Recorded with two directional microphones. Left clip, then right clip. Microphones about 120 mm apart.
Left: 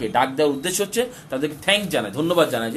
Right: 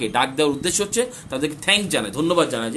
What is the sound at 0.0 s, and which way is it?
Speech, 30° right (ahead or behind).